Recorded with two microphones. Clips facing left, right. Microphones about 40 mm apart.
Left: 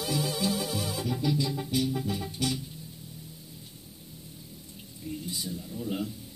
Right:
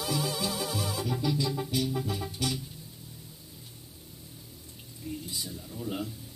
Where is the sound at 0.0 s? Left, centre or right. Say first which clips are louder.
Left 1 dB; centre.